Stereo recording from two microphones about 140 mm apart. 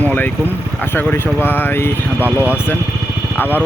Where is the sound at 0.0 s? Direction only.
15° left (ahead or behind).